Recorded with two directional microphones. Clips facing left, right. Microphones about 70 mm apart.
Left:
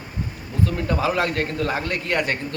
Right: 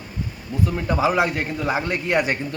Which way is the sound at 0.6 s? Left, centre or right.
Centre.